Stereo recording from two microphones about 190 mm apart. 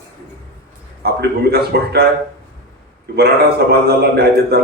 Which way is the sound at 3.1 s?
55° right (ahead or behind).